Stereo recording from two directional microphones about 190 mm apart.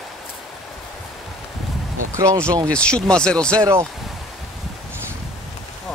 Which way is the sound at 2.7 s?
5° left (ahead or behind).